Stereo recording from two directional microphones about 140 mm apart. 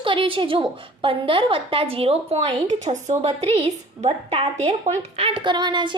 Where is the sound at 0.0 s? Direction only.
40° right (ahead or behind).